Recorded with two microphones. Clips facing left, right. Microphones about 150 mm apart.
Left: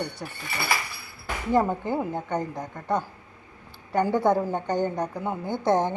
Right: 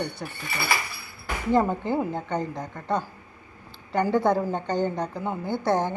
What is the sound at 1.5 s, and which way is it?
Speech, 15° left (ahead or behind).